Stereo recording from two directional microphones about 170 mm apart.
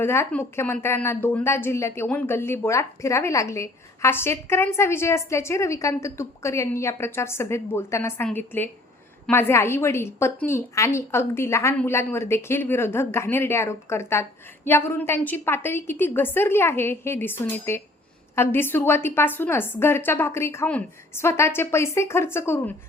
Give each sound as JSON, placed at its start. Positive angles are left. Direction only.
{"t": 0.0, "sound": "a woman's voice", "side_deg": 15}